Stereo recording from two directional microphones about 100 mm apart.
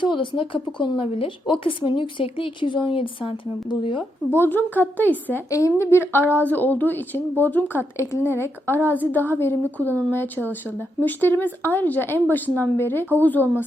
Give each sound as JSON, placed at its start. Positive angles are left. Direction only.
{"t": 0.0, "sound": "speech", "side_deg": 55}
{"t": 4.3, "sound": "a woman's voice", "side_deg": 20}
{"t": 5.5, "sound": "a woman's voice", "side_deg": 35}